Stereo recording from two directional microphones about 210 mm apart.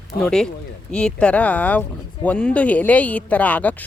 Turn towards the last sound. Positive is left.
turn(degrees=5)  # may be behind; listen again after turning